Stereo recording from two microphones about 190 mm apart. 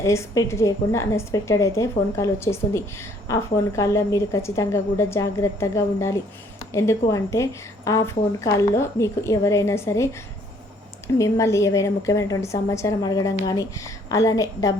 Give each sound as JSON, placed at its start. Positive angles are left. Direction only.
{"t": 0.0, "sound": "a woman's voice", "side_deg": 15}
{"t": 11.2, "sound": "a woman's voice", "side_deg": 15}